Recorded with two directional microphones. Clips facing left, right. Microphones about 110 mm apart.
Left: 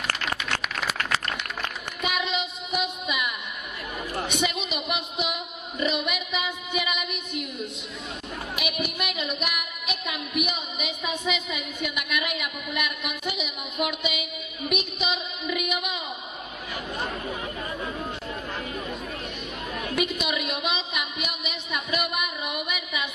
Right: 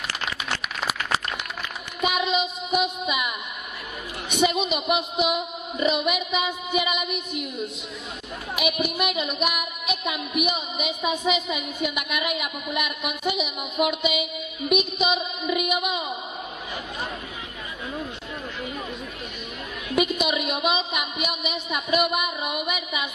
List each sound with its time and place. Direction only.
0.0 s a sound: 50° left (ahead or behind)
2.0 s child singing: 20° right (ahead or behind)
4.4 s music: 20° right (ahead or behind)
8.5 s music: 20° right (ahead or behind)
20.0 s music: 20° right (ahead or behind)